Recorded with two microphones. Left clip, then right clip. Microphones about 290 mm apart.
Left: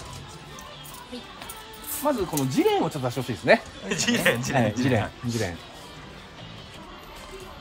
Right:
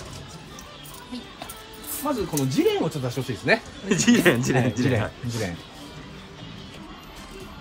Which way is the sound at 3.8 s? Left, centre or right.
Centre.